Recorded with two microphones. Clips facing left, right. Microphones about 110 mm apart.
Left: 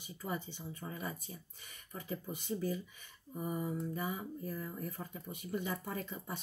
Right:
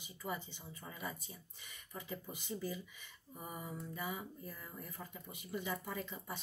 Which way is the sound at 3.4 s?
40° left (ahead or behind).